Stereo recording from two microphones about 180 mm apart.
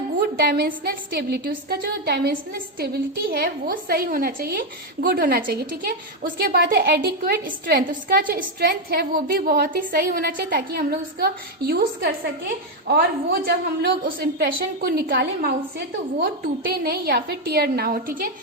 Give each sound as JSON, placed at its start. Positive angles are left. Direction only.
{"t": 0.2, "sound": "a woman's voice", "side_deg": -60}